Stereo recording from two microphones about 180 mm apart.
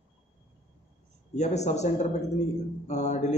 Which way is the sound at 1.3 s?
40° left (ahead or behind).